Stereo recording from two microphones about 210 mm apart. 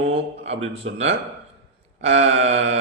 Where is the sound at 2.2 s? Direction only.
30° right (ahead or behind).